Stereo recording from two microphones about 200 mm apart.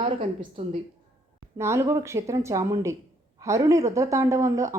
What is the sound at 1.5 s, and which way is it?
Speech, 15° right (ahead or behind).